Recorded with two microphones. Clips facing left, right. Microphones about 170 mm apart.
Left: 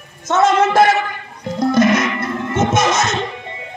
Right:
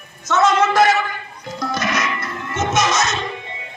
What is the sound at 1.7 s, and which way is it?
Music, 55° left (ahead or behind).